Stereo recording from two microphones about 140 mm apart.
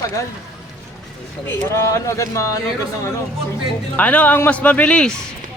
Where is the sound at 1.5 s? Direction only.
15° left (ahead or behind).